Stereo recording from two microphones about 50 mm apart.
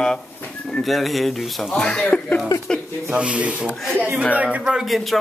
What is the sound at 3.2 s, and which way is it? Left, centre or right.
Speech, right.